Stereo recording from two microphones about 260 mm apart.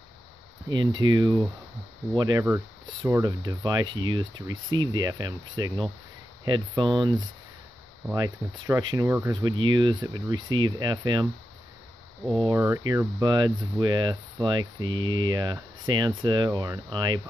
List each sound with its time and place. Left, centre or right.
0.7 s hum: centre
8.1 s hum: centre
12.4 s hum: centre